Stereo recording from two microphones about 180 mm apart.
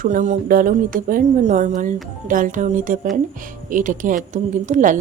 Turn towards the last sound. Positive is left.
turn(degrees=-45)  # may be behind; listen again after turning